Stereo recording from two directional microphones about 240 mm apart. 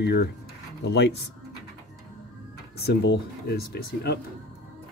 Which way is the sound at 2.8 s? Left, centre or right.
Left.